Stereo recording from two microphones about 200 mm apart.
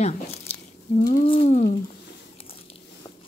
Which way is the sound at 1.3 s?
35° left (ahead or behind).